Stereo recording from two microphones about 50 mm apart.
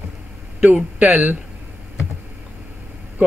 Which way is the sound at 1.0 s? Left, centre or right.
Right.